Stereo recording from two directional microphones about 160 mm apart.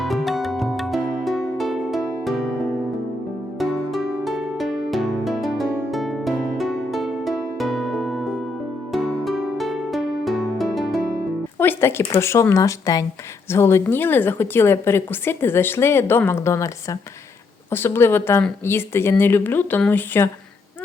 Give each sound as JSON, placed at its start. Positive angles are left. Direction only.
{"t": 0.0, "sound": "music", "side_deg": 0}
{"t": 3.6, "sound": "music", "side_deg": 0}
{"t": 11.6, "sound": "a woman's voice", "side_deg": 15}